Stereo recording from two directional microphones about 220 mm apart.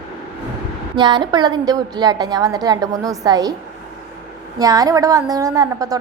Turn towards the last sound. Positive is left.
turn(degrees=-15)  # may be behind; listen again after turning